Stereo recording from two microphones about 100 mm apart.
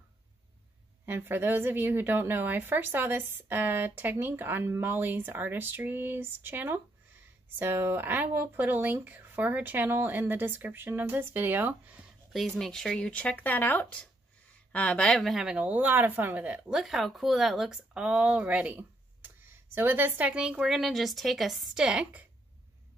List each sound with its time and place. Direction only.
1.0 s a woman's voice: 20° right (ahead or behind)
12.3 s speech: centre (ahead or behind)